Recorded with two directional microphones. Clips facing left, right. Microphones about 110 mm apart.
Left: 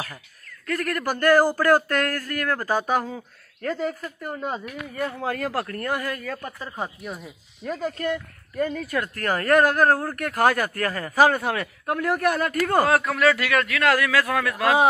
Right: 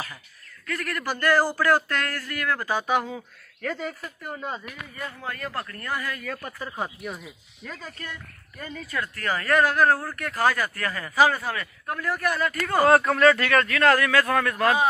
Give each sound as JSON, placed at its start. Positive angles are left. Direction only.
{"t": 0.7, "sound": "a woman's voice", "side_deg": 45}
{"t": 3.2, "sound": "a man's voice", "side_deg": 0}
{"t": 5.2, "sound": "speech", "side_deg": 90}
{"t": 6.3, "sound": "a man's voice", "side_deg": -5}
{"t": 7.6, "sound": "speech", "side_deg": 35}
{"t": 8.0, "sound": "a woman's voice", "side_deg": 55}
{"t": 12.8, "sound": "a man's voice", "side_deg": 0}
{"t": 14.6, "sound": "a man's voice", "side_deg": 90}